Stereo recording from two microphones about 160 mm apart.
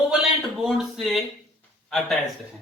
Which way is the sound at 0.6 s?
Centre (ahead or behind).